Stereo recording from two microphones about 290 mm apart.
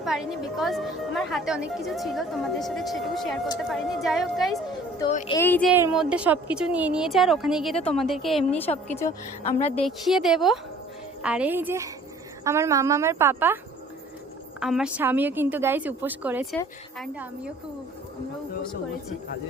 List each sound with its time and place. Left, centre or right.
0.0 s a woman's voice: centre
4.9 s speech: centre
5.4 s a woman's voice: centre
5.7 s a woman's voice: centre
9.4 s speech: left
9.8 s a woman's voice: centre
14.6 s a woman's voice: centre